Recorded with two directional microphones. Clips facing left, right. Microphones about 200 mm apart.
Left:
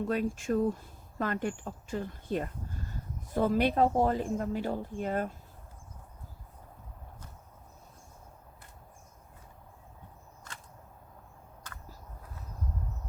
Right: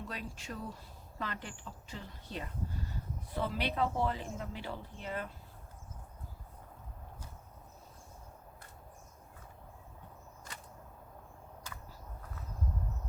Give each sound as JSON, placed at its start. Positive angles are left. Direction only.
{"t": 0.0, "sound": "speech", "side_deg": 50}